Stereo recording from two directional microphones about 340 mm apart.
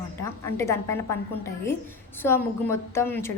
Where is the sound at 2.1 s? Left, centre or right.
Centre.